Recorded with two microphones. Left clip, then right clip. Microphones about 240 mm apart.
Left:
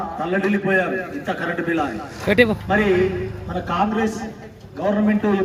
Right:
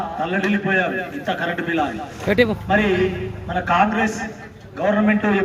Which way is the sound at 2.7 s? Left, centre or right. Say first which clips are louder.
Even; centre.